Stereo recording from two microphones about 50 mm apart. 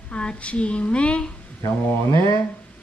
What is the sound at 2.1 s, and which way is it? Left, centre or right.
Speech, left.